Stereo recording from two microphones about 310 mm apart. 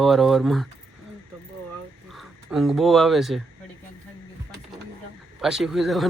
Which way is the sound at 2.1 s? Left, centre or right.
Centre.